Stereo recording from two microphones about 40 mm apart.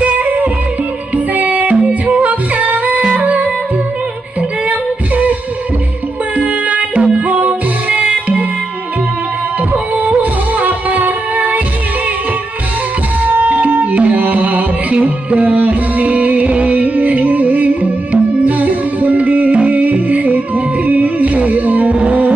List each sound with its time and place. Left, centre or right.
0.0 s music: right
4.4 s female singing: right
6.3 s music: right
9.7 s music: right
13.2 s music: right
21.9 s music: right